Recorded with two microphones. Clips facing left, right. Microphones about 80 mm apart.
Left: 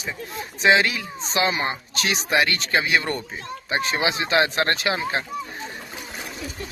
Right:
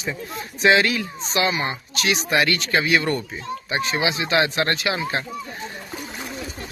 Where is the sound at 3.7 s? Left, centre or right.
Left.